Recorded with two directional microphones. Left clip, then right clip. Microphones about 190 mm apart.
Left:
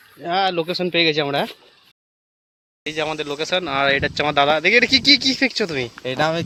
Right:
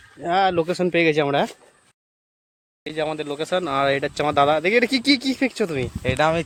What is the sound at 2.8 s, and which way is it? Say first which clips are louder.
Speech: left 2 dB; 5° right (ahead or behind).